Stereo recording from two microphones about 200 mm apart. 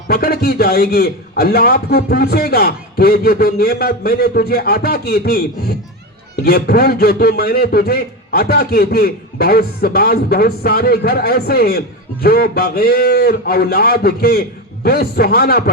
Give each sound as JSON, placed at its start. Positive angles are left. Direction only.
{"t": 0.1, "sound": "a man's voice", "side_deg": 50}